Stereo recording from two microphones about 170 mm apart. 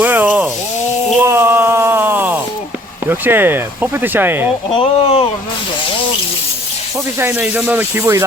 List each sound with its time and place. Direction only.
0.0 s a sound: 10° right (ahead or behind)
3.1 s speech: 10° right (ahead or behind)
4.7 s speech: 35° left (ahead or behind)
7.2 s speech: 10° right (ahead or behind)